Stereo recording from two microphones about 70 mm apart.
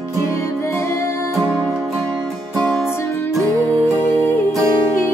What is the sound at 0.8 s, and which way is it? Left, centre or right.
Music, left.